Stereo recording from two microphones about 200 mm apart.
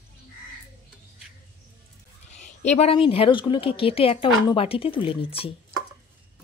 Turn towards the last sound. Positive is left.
turn(degrees=30)  # may be behind; listen again after turning